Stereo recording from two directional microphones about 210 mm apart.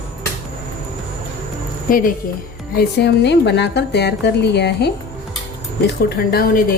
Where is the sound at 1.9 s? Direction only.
40° left (ahead or behind).